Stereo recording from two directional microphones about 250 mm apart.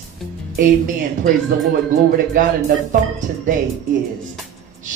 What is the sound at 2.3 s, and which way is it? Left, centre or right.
Speech, right.